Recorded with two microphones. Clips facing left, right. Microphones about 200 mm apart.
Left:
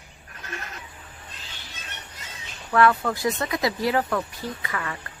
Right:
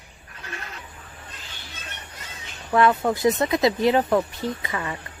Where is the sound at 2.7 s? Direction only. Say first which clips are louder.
Right 1 dB; 20° right (ahead or behind).